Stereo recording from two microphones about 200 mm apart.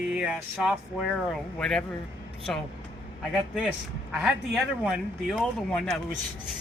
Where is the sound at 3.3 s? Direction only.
5° right (ahead or behind).